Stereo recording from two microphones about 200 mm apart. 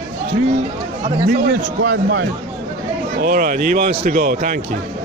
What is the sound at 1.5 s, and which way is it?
Speech, 60° right (ahead or behind).